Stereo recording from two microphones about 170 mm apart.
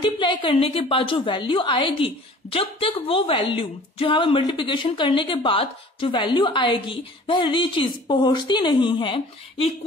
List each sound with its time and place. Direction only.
0.0 s a woman's voice: 30° left (ahead or behind)